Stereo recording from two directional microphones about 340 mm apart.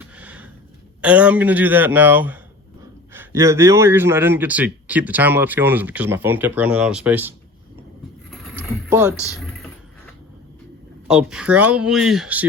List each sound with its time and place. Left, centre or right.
0.0 s a sound: centre
1.0 s a man's voice: centre
8.3 s boat: centre
9.3 s typing: centre
11.1 s a man's voice: centre